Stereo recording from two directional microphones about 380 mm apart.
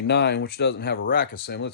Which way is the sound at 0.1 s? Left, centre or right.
Left.